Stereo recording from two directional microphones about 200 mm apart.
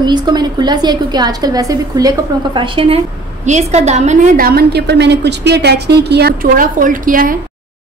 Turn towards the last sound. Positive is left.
turn(degrees=-45)  # may be behind; listen again after turning